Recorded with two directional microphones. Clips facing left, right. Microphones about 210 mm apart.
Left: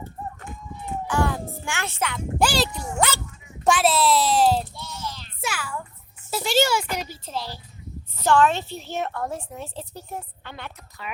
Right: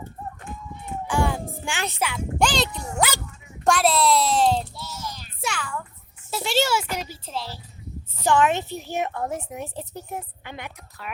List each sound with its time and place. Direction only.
1.0 s a sound: 15° right (ahead or behind)
2.4 s speech: 5° left (ahead or behind)
4.9 s child singing: 10° right (ahead or behind)
5.4 s a sound: 5° left (ahead or behind)
6.3 s speech: centre (ahead or behind)
8.2 s a woman's voice: 15° right (ahead or behind)